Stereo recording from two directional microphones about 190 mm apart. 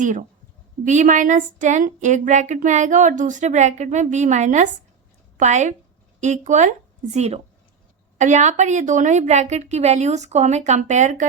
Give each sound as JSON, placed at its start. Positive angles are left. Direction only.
{"t": 0.0, "sound": "speech", "side_deg": -40}